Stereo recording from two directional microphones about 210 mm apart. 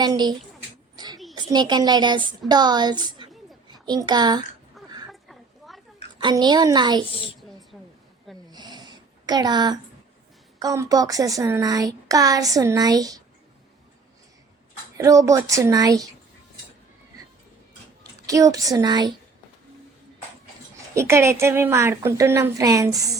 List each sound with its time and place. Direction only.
0.0 s a woman's voice: 20° right (ahead or behind)
0.9 s a sound: 20° right (ahead or behind)
1.5 s a woman's voice: 20° right (ahead or behind)
5.3 s a sound: centre (ahead or behind)
6.1 s a woman's voice: 20° right (ahead or behind)
7.1 s a woman's voice: 25° left (ahead or behind)
7.7 s a sound: 5° right (ahead or behind)
8.4 s a sound: 20° right (ahead or behind)
10.6 s speech: 15° right (ahead or behind)
14.9 s speech: 15° right (ahead or behind)
18.3 s speech: 15° right (ahead or behind)
20.9 s speech: 15° right (ahead or behind)